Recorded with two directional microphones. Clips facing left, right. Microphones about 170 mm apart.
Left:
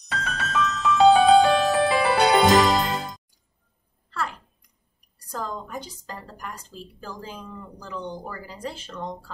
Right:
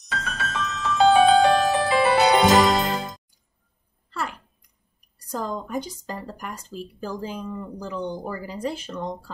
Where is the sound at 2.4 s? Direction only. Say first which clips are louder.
Even; centre (ahead or behind).